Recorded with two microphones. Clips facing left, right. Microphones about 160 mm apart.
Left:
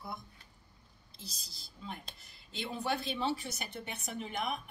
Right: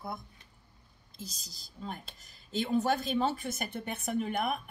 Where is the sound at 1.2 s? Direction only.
45° right (ahead or behind).